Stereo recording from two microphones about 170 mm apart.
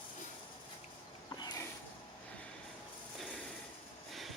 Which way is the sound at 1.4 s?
25° left (ahead or behind).